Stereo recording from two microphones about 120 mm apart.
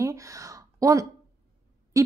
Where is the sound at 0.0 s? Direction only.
25° right (ahead or behind).